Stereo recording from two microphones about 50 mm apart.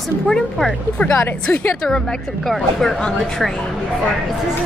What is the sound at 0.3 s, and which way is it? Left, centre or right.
Speech, centre.